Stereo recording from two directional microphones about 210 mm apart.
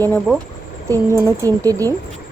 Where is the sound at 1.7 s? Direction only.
15° right (ahead or behind).